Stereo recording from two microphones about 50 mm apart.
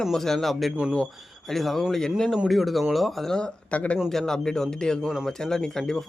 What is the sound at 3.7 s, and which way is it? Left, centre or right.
Speech, left.